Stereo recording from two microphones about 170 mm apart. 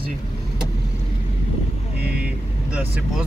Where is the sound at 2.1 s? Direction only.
5° right (ahead or behind).